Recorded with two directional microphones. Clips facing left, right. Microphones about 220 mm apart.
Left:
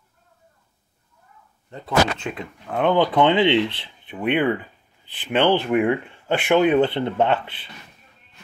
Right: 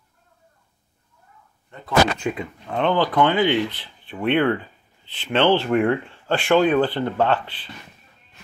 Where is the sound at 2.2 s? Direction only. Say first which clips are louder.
Right 4 dB; 5° right (ahead or behind).